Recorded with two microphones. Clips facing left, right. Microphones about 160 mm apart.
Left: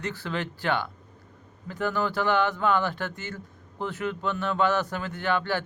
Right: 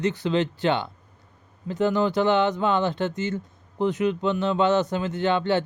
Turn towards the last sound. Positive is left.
turn(degrees=-20)  # may be behind; listen again after turning